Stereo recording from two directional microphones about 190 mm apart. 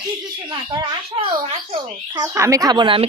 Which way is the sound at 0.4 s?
20° right (ahead or behind).